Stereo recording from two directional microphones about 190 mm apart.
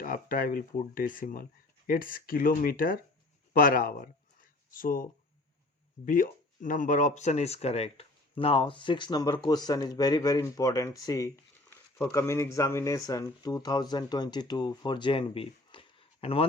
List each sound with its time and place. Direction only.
0.0 s speech: 45° left (ahead or behind)
6.1 s speech: 45° left (ahead or behind); by 16.5 s 30° left (ahead or behind)